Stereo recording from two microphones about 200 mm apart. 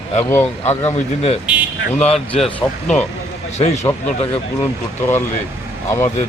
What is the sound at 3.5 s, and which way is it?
Speech, 35° left (ahead or behind).